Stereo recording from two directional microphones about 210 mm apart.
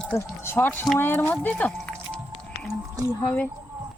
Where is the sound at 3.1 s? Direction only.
10° left (ahead or behind).